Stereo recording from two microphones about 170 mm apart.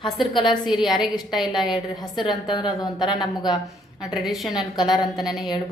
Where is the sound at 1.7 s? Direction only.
25° left (ahead or behind).